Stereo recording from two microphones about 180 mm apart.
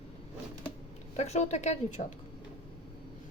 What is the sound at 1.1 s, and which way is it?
Speech, 40° left (ahead or behind).